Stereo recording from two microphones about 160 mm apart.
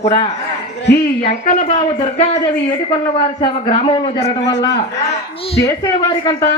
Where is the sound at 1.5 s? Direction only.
40° left (ahead or behind).